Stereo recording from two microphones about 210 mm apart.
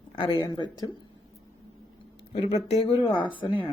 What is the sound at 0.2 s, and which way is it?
Speech, 20° left (ahead or behind).